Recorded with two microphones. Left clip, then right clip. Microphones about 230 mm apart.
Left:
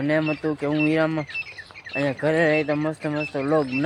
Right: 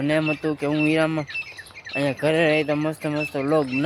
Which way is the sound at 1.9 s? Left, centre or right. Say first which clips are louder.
Right 1 dB; centre.